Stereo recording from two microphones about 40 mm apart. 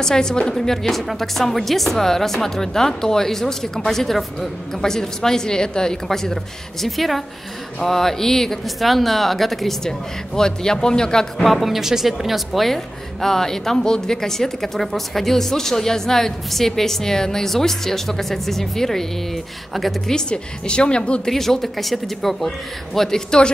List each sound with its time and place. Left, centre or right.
0.0 s a woman's voice: centre
8.6 s a woman's voice: centre
11.4 s a woman's voice: centre
20.1 s a woman's voice: left
21.3 s a woman's voice: centre